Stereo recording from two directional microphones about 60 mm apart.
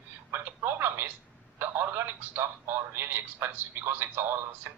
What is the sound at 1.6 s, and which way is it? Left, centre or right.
Speech, right.